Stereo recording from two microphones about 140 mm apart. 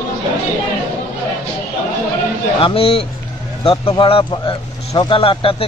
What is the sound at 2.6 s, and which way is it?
Speech, 45° left (ahead or behind).